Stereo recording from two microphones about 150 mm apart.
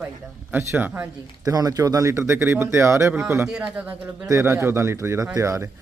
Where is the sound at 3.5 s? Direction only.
5° right (ahead or behind).